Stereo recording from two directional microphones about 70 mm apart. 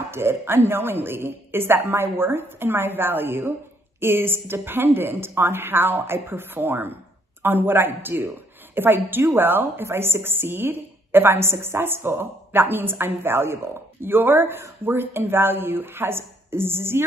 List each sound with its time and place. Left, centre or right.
0.1 s a woman's voice: right